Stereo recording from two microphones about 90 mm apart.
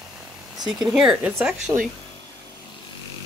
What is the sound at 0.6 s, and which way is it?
Speech, 5° right (ahead or behind).